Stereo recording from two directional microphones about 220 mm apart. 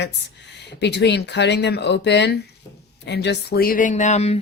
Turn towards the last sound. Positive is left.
turn(degrees=30)  # may be behind; listen again after turning